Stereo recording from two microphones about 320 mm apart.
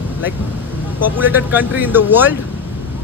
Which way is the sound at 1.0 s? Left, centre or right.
Centre.